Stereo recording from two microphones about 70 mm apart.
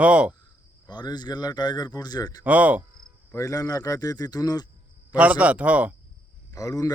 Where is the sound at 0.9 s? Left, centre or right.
Left.